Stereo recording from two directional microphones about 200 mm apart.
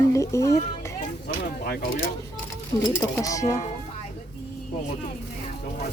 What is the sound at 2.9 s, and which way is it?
Speech, 10° left (ahead or behind).